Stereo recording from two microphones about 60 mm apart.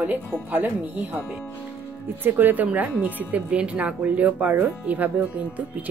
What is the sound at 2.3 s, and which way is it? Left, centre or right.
Speech, right.